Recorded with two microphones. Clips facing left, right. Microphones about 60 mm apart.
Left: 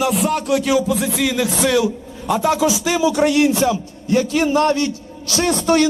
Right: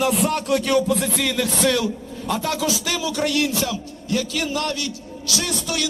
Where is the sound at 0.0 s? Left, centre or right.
Centre.